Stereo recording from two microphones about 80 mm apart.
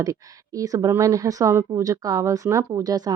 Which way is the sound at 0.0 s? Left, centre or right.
Right.